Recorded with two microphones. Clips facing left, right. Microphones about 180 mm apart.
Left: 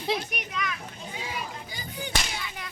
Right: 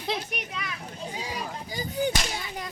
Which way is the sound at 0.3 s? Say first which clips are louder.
Left 2 dB; 30° right (ahead or behind).